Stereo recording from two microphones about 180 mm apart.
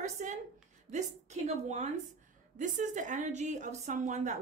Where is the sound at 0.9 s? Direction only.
40° right (ahead or behind).